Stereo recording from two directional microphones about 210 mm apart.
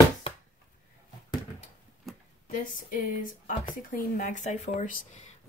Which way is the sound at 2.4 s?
40° left (ahead or behind).